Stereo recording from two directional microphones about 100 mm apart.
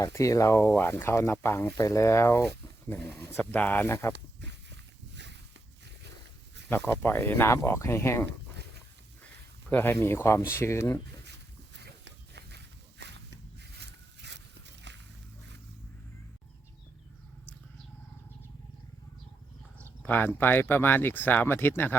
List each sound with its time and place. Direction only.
0.0 s speech: 35° left (ahead or behind)
6.7 s speech: 20° left (ahead or behind)
9.7 s speech: 20° left (ahead or behind)
20.0 s speech: 15° left (ahead or behind)